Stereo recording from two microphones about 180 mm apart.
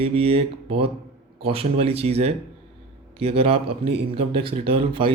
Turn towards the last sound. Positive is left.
turn(degrees=-30)  # may be behind; listen again after turning